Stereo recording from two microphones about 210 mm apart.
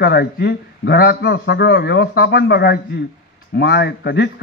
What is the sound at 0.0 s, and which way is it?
A man's voice, 50° left (ahead or behind).